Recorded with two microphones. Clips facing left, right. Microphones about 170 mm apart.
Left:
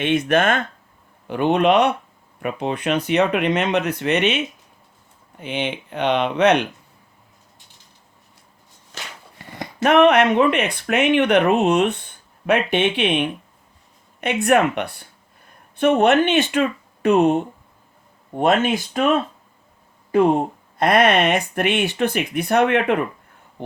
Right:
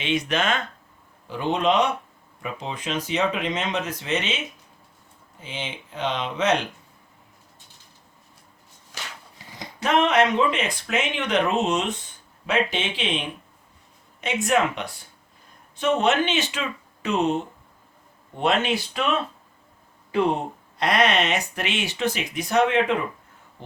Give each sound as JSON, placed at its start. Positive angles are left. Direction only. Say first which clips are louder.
{"t": 0.0, "sound": "speech", "louder": "left 6 dB", "side_deg": 55}
{"t": 5.4, "sound": "speech", "louder": "left 9 dB", "side_deg": 65}
{"t": 9.3, "sound": "speech", "louder": "left 6 dB", "side_deg": 60}
{"t": 20.1, "sound": "a sound", "louder": "left 6 dB", "side_deg": 45}
{"t": 20.7, "sound": "speech", "louder": "left 5 dB", "side_deg": 55}
{"t": 23.6, "sound": "a sound", "louder": "left 11 dB", "side_deg": 60}